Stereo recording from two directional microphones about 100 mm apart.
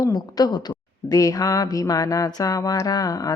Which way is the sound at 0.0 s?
40° left (ahead or behind).